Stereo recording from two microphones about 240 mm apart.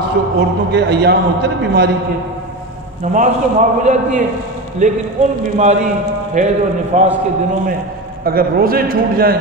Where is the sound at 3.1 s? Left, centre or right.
Right.